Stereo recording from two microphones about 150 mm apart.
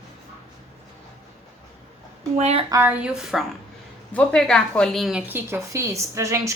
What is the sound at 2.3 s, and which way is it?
Speech, 45° right (ahead or behind).